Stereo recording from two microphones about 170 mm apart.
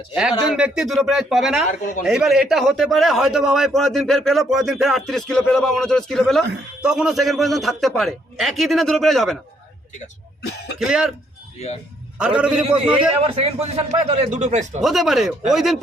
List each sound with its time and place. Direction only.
0.1 s a man's voice: 5° right (ahead or behind)
10.8 s a man's voice: 5° right (ahead or behind)
12.2 s a man's voice: 5° right (ahead or behind)
13.2 s speech: 35° right (ahead or behind)
14.8 s a man's voice: centre (ahead or behind)